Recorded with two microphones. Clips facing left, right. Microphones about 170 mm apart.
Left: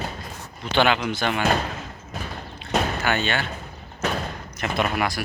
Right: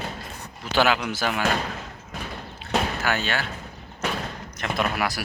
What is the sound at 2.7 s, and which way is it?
Boat, centre (ahead or behind).